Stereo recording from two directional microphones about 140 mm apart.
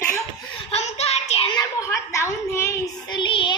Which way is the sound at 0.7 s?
50° left (ahead or behind).